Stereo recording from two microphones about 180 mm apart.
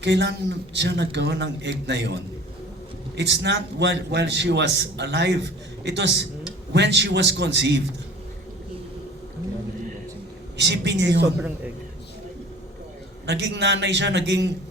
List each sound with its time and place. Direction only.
0.0 s a man's voice: 70° right (ahead or behind)
10.6 s a man's voice: 75° right (ahead or behind)
11.3 s a man's voice: 10° right (ahead or behind)
13.2 s a man's voice: 75° right (ahead or behind)